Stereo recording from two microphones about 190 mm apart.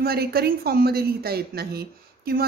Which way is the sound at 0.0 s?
55° right (ahead or behind).